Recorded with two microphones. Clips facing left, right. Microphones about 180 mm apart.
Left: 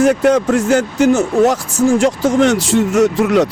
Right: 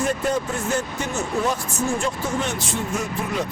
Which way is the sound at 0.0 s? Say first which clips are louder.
Left 11 dB; 90° left.